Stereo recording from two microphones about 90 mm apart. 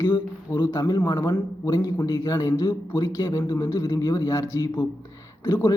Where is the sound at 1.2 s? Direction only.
50° left (ahead or behind); by 5.8 s 35° left (ahead or behind).